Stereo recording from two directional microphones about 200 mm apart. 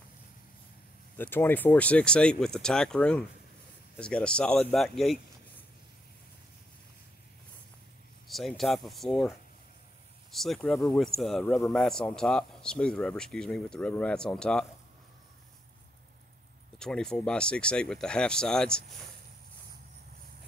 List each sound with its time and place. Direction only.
1.1 s a man's voice: 10° left (ahead or behind)
8.3 s a man's voice: centre (ahead or behind)
10.3 s a man's voice: centre (ahead or behind)
16.7 s a man's voice: 5° left (ahead or behind)